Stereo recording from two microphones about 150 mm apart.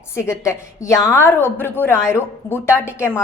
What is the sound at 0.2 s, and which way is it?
A woman's voice, 20° left (ahead or behind).